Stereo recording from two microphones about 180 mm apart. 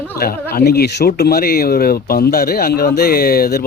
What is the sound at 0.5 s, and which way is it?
Speech, 60° left (ahead or behind).